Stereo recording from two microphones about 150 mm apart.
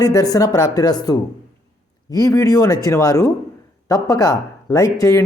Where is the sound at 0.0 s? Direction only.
25° left (ahead or behind).